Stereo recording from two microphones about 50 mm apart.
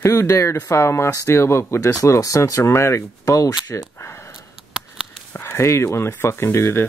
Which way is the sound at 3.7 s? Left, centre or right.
Left.